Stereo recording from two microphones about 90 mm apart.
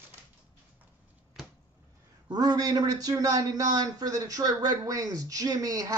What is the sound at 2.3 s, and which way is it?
A man's voice, 50° right (ahead or behind).